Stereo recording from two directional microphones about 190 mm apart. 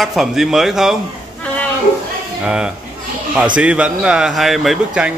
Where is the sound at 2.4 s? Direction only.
5° right (ahead or behind).